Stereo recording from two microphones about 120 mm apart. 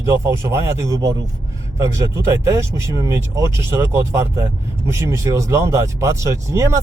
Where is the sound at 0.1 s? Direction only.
25° right (ahead or behind).